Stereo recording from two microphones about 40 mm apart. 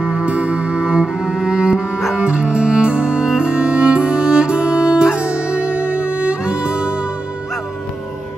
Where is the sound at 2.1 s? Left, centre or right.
Right.